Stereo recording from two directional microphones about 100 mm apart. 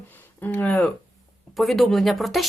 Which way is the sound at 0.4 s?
15° left (ahead or behind).